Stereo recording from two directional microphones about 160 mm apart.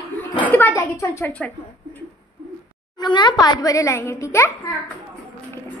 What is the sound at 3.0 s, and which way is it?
A child's voice, 30° left (ahead or behind).